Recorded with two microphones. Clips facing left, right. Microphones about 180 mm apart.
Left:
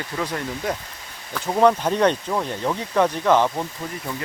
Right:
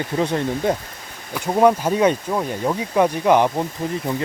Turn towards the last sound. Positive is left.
turn(degrees=-15)  # may be behind; listen again after turning